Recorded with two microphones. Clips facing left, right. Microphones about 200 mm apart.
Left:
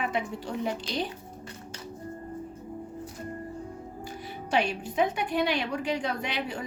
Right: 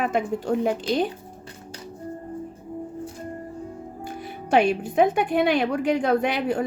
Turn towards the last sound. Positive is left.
turn(degrees=-55)  # may be behind; listen again after turning